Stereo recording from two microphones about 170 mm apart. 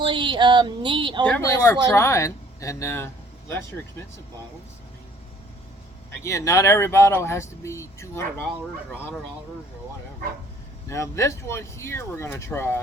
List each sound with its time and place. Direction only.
0.0 s a sound: 25° right (ahead or behind)
1.2 s speech: 15° left (ahead or behind)
6.2 s speech: 20° left (ahead or behind)
10.8 s speech: 15° left (ahead or behind)